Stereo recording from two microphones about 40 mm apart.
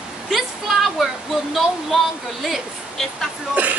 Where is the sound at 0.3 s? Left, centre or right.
Centre.